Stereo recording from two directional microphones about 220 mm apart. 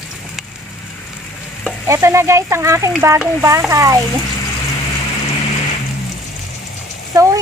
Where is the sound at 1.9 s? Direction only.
10° right (ahead or behind).